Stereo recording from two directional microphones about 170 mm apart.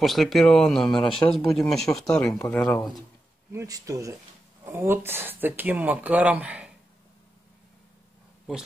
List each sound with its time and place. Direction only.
0.0 s speech: centre (ahead or behind)
2.3 s speech: 15° left (ahead or behind)
3.5 s speech: 20° right (ahead or behind)